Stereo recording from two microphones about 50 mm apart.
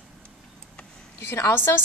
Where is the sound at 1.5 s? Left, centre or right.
Left.